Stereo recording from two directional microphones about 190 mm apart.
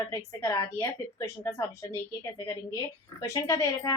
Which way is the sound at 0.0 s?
15° left (ahead or behind).